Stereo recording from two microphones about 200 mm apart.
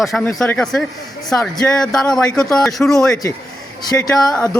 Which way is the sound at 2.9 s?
15° left (ahead or behind).